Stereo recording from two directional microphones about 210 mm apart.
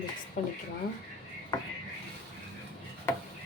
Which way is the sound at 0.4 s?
35° left (ahead or behind).